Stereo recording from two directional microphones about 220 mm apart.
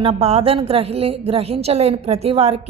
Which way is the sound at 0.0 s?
25° right (ahead or behind).